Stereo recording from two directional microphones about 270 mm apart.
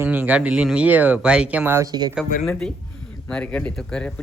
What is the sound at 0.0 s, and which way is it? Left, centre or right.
Speech, centre.